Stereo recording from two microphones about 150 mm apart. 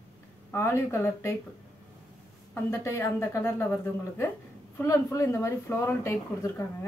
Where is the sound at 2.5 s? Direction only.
15° left (ahead or behind).